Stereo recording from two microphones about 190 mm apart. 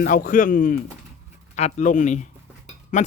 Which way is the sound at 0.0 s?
45° left (ahead or behind).